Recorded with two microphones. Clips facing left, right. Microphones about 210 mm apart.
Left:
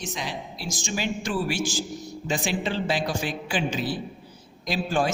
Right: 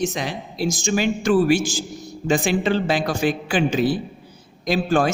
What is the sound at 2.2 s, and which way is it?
A man's voice, 60° right (ahead or behind).